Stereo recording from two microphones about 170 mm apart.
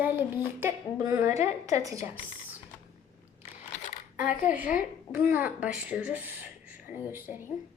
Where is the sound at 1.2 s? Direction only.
45° left (ahead or behind).